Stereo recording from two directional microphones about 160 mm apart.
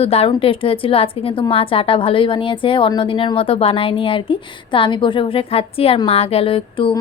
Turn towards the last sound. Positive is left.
turn(degrees=35)  # may be behind; listen again after turning